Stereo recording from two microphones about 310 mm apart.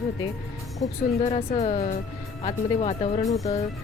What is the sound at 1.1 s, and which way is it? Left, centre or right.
Speech, centre.